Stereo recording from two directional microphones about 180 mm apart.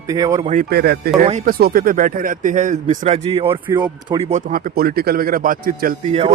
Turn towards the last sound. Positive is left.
turn(degrees=-50)  # may be behind; listen again after turning